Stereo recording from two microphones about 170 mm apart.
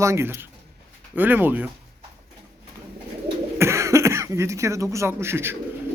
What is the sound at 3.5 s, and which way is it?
A man's voice, 15° right (ahead or behind).